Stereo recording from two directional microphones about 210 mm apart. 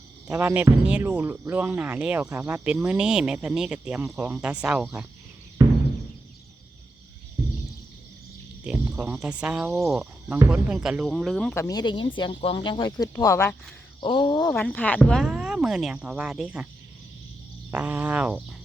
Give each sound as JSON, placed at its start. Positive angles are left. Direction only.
{"t": 0.3, "sound": "speech", "side_deg": -10}
{"t": 5.6, "sound": "music", "side_deg": -15}
{"t": 8.6, "sound": "speech", "side_deg": -5}
{"t": 11.5, "sound": "speech", "side_deg": 15}
{"t": 14.5, "sound": "speech", "side_deg": 10}
{"t": 17.7, "sound": "speech", "side_deg": -10}